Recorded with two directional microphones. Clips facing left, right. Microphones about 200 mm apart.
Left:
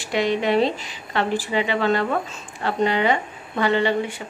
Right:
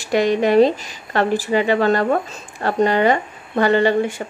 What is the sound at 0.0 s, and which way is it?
Speech, 45° right (ahead or behind).